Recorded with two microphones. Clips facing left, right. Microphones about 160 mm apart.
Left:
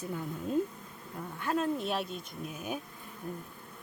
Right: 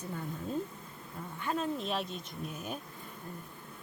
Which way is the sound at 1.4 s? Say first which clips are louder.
Left 3 dB; 5° left (ahead or behind).